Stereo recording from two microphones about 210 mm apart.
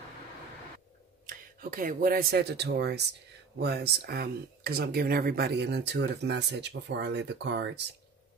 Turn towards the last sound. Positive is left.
turn(degrees=-55)  # may be behind; listen again after turning